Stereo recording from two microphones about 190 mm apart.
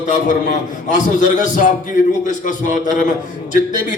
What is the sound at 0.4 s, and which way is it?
A man's voice, 40° left (ahead or behind).